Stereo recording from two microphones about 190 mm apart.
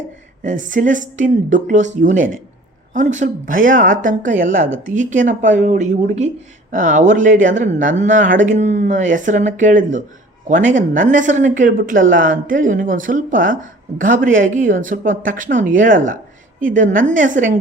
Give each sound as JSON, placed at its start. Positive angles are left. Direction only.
{"t": 0.4, "sound": "speech", "side_deg": -40}